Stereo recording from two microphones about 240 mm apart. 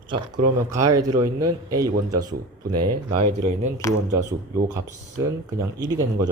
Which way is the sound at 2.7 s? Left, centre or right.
Right.